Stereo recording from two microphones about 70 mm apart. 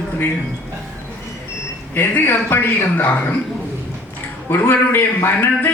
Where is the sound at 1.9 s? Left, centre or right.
Left.